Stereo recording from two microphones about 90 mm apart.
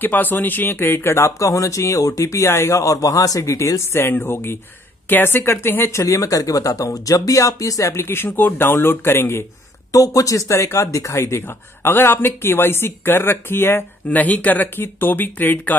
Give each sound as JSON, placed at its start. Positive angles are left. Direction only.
{"t": 0.0, "sound": "speech", "side_deg": 20}
{"t": 9.9, "sound": "speech", "side_deg": 40}